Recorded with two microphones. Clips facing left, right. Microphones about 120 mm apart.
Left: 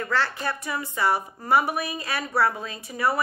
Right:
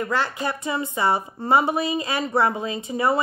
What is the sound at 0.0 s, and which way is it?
Speech, 15° right (ahead or behind).